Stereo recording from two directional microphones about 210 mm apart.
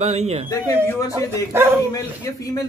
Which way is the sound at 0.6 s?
15° left (ahead or behind).